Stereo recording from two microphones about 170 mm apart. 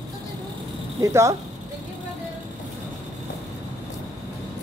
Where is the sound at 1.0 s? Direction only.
20° right (ahead or behind).